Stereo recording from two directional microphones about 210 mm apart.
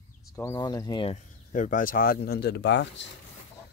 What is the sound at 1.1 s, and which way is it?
Speech, 40° left (ahead or behind).